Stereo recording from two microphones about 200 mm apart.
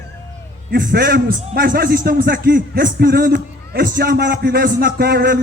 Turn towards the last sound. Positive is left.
turn(degrees=-50)  # may be behind; listen again after turning